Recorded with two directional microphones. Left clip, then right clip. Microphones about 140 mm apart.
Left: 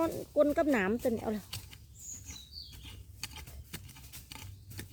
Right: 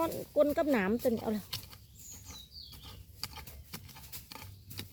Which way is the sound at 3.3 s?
Centre (ahead or behind).